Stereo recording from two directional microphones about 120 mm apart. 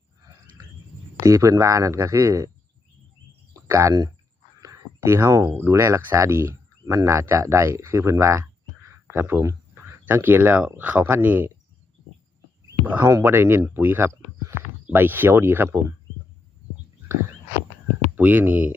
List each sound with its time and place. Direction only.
1.2 s speech: 25° right (ahead or behind)
3.5 s a sound: 25° right (ahead or behind)
4.6 s speech: 25° right (ahead or behind)
12.8 s speech: 15° right (ahead or behind)
18.1 s speech: 15° right (ahead or behind)